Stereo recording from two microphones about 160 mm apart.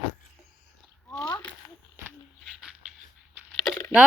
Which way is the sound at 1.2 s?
25° left (ahead or behind).